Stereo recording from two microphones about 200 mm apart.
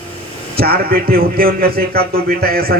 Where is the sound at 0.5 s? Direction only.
50° right (ahead or behind).